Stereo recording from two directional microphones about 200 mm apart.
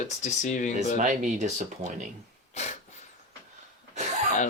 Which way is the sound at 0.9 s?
40° right (ahead or behind).